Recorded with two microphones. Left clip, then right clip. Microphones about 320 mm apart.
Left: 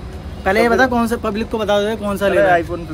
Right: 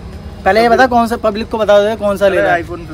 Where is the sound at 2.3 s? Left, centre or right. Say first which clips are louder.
Right 1 dB; centre.